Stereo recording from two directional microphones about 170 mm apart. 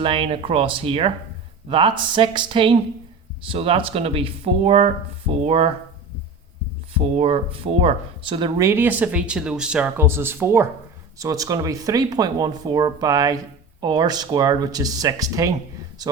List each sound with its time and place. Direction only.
0.0 s speech: 30° right (ahead or behind)
6.9 s speech: 40° right (ahead or behind)
8.6 s speech: 15° right (ahead or behind)